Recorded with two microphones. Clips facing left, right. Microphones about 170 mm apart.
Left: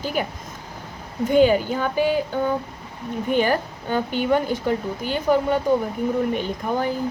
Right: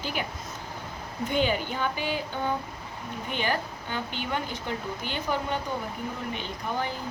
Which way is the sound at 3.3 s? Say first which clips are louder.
Left 9 dB; 45° left (ahead or behind).